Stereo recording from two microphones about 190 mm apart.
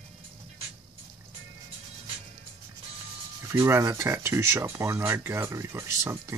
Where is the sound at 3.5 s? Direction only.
15° right (ahead or behind).